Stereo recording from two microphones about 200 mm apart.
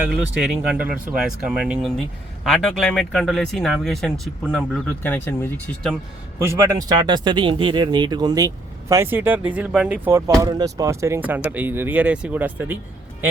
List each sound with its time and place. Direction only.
0.4 s speech: 5° right (ahead or behind)
6.4 s speech: 15° right (ahead or behind)